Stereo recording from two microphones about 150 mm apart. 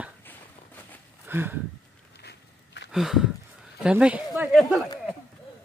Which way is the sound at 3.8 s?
10° right (ahead or behind).